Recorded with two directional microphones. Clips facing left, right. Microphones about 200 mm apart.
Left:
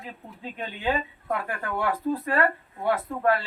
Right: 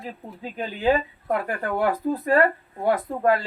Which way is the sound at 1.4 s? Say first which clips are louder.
Right 5 dB; 35° right (ahead or behind).